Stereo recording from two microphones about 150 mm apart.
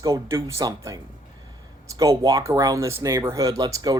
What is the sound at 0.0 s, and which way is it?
Speech, 20° right (ahead or behind).